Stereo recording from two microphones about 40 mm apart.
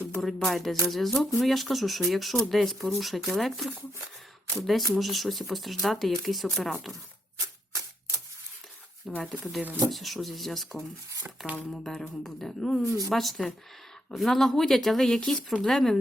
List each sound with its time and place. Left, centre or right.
0.2 s speech: centre
9.2 s speech: centre